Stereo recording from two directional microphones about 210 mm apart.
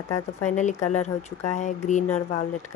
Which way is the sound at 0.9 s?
35° left (ahead or behind).